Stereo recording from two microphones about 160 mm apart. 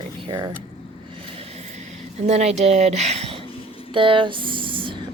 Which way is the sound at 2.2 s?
40° right (ahead or behind).